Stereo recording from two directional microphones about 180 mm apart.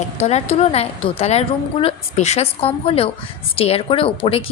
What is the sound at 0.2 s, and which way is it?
A woman's voice, 35° left (ahead or behind).